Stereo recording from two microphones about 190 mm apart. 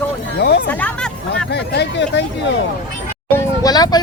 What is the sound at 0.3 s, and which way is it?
Speech, 60° left (ahead or behind).